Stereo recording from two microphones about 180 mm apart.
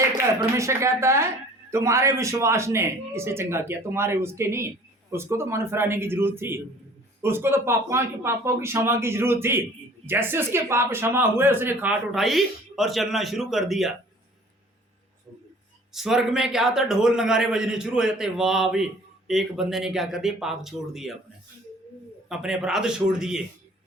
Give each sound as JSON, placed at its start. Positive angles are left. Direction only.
{"t": 0.3, "sound": "speech", "side_deg": -15}
{"t": 15.9, "sound": "a man's voice", "side_deg": 0}
{"t": 22.3, "sound": "a man's voice", "side_deg": -5}